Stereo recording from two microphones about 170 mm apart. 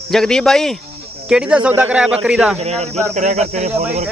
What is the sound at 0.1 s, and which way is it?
Speech, 5° left (ahead or behind).